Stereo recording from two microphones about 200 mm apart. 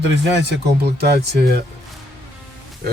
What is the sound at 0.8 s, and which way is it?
Speech, 55° right (ahead or behind).